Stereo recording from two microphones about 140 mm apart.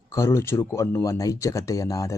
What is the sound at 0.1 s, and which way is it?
Speech, 20° left (ahead or behind).